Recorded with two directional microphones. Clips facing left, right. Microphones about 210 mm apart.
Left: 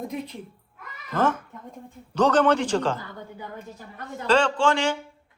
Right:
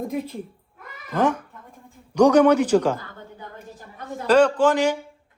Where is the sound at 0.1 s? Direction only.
50° right (ahead or behind).